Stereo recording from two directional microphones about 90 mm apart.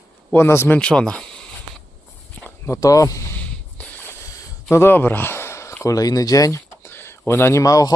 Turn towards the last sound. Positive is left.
turn(degrees=40)  # may be behind; listen again after turning